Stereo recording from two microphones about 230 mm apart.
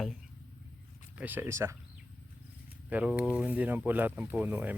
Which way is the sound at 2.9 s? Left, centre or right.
Centre.